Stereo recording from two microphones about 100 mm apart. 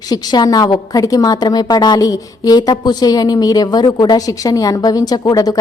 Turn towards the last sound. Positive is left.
turn(degrees=40)  # may be behind; listen again after turning